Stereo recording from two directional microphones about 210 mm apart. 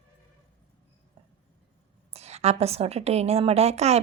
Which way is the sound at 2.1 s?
30° right (ahead or behind).